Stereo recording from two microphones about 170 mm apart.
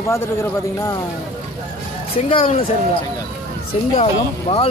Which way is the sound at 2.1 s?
30° left (ahead or behind).